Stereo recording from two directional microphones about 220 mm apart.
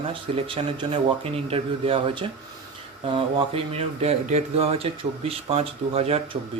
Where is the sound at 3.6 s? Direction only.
25° right (ahead or behind).